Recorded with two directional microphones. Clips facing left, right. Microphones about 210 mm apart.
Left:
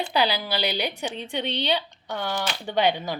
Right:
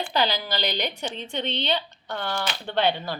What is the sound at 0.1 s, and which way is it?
A woman's voice, 10° left (ahead or behind).